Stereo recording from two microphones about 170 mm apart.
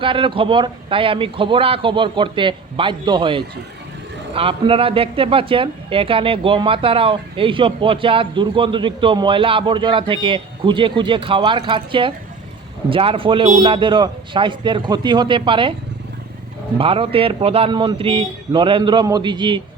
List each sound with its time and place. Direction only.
0.0 s speech: 30° right (ahead or behind)
16.7 s speech: 35° right (ahead or behind)